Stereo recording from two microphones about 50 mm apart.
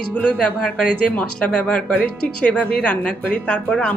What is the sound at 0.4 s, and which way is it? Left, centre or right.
Speech, centre.